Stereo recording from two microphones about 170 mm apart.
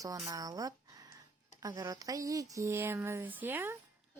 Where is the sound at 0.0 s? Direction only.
20° right (ahead or behind).